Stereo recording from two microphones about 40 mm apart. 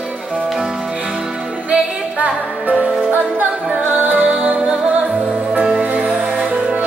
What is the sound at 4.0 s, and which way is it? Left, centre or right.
Music, right.